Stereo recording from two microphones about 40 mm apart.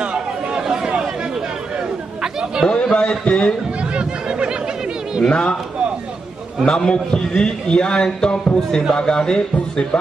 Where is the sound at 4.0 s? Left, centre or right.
Right.